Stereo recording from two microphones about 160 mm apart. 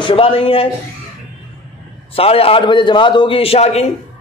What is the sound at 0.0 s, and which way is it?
Speech, 35° left (ahead or behind).